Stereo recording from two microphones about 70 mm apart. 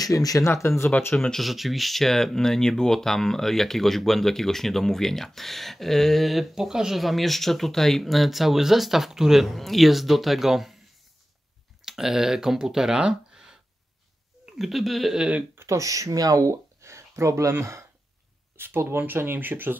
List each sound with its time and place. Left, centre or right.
0.0 s speech: left
1.1 s speech: centre
11.8 s speech: centre
14.6 s speech: centre
15.5 s speech: right